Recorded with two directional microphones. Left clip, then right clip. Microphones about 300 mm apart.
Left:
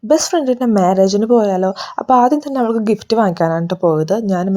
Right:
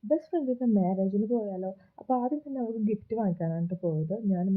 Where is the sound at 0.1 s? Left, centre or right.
Centre.